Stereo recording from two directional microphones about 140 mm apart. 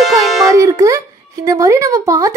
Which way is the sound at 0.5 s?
20° right (ahead or behind).